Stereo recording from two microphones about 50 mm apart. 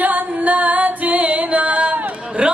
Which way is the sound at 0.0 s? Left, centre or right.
Right.